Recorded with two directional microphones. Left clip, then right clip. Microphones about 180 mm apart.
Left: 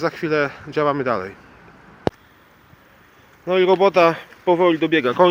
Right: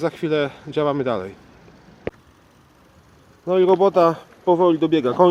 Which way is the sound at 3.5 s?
10° right (ahead or behind).